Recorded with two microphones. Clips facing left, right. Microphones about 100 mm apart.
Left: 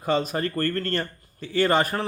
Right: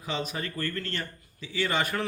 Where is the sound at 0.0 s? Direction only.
45° left (ahead or behind).